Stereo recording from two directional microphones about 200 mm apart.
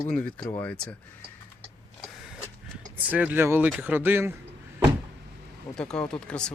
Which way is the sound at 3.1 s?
10° right (ahead or behind).